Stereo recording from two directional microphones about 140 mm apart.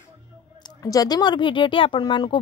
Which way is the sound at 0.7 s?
25° left (ahead or behind).